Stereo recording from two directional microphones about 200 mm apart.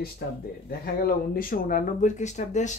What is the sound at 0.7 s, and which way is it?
Speech, 50° left (ahead or behind).